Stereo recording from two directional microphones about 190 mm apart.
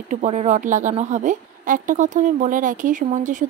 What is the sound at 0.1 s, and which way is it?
A woman's voice, 40° right (ahead or behind).